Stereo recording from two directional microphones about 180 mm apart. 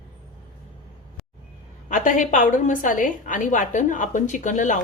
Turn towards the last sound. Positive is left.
turn(degrees=45)  # may be behind; listen again after turning